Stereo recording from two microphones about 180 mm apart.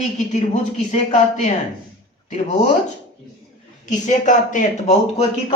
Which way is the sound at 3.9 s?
45° left (ahead or behind).